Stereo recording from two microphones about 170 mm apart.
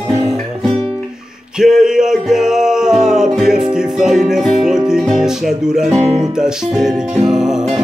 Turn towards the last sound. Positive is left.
turn(degrees=-5)  # may be behind; listen again after turning